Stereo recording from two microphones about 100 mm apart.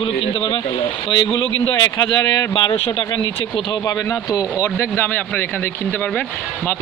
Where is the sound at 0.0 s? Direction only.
65° left (ahead or behind); by 2.4 s 40° left (ahead or behind).